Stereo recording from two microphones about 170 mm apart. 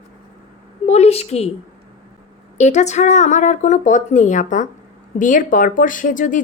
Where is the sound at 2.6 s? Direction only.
45° left (ahead or behind).